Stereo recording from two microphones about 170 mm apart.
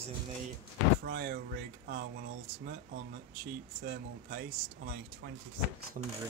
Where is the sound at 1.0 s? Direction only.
65° right (ahead or behind).